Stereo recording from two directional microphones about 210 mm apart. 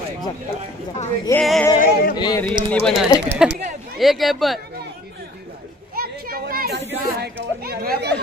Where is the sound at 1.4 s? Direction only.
5° left (ahead or behind).